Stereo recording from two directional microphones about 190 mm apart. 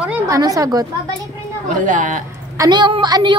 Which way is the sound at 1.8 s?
45° right (ahead or behind).